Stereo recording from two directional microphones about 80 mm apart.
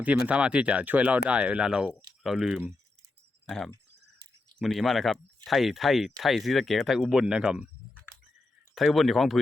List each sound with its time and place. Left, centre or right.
0.0 s speech: centre
4.6 s speech: centre
8.7 s speech: centre